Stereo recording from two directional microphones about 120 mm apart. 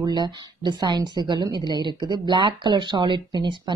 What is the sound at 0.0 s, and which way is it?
A woman's voice, 35° right (ahead or behind).